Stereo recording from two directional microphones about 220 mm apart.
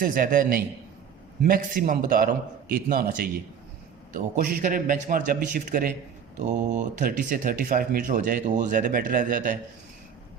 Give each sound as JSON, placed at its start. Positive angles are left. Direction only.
{"t": 0.0, "sound": "speech", "side_deg": -40}